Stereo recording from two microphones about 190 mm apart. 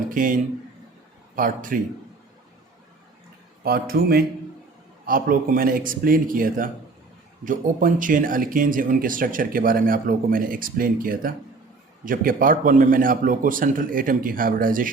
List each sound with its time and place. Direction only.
0.1 s a man's voice: 45° right (ahead or behind)
1.4 s speech: 45° right (ahead or behind)
3.6 s speech: 50° right (ahead or behind)